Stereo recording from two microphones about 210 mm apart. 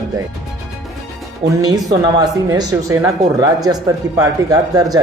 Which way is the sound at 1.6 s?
20° right (ahead or behind).